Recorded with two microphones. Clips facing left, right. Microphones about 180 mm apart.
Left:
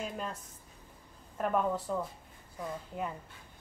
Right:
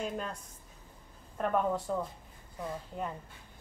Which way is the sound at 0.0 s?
Centre (ahead or behind).